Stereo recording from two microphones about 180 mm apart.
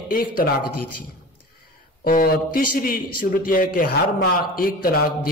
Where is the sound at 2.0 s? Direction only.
50° left (ahead or behind).